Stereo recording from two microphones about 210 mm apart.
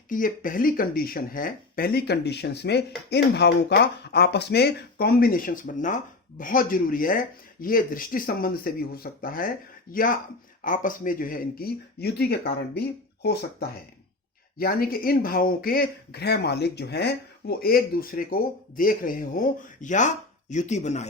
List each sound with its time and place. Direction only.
0.1 s speech: 40° left (ahead or behind)